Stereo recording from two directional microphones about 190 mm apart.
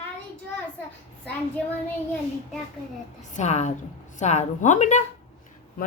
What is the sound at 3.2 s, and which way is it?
A woman's voice, 40° left (ahead or behind).